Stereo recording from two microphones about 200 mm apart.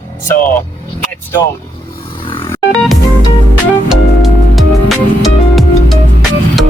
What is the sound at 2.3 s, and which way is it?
Music, 25° left (ahead or behind).